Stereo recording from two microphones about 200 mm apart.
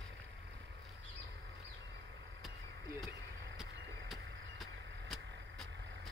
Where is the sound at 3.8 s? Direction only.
60° right (ahead or behind).